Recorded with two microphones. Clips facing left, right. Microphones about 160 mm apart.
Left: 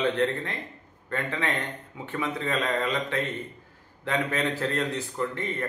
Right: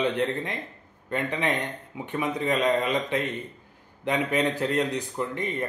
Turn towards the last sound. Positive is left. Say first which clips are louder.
# right 1 dB
turn(degrees=-15)  # may be behind; listen again after turning